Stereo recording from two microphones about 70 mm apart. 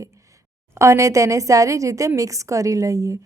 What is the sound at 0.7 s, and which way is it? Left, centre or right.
A woman's voice, right.